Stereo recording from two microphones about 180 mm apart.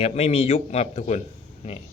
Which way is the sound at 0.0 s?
35° left (ahead or behind).